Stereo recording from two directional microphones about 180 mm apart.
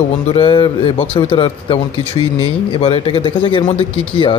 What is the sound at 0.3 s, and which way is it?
Speech, 30° left (ahead or behind).